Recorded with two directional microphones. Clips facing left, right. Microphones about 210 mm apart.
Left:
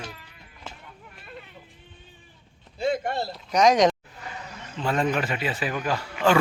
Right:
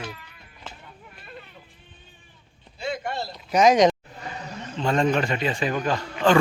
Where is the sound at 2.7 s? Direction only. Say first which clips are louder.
Left 4 dB; 50° left (ahead or behind).